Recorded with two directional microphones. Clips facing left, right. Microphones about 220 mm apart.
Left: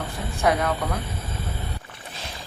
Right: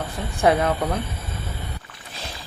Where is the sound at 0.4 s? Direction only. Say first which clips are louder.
Right 4 dB; 25° right (ahead or behind).